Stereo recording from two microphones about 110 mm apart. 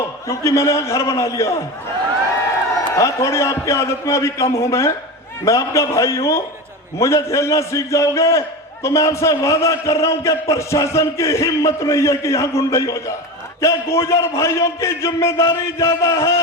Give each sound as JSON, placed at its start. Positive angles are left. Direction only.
{"t": 0.3, "sound": "a man's voice", "side_deg": 30}
{"t": 2.9, "sound": "a man's voice", "side_deg": 30}